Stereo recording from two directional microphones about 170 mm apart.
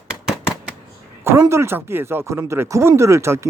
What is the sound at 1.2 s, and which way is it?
Speech, 15° right (ahead or behind).